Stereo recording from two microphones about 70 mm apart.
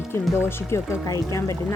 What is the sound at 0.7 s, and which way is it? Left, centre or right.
Speech, left.